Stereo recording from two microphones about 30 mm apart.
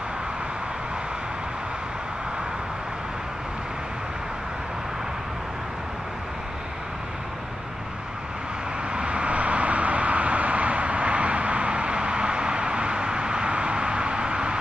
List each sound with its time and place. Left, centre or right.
8.9 s vehicle: right